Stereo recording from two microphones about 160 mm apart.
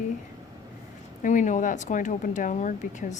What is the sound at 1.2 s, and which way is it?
Speech, 50° left (ahead or behind).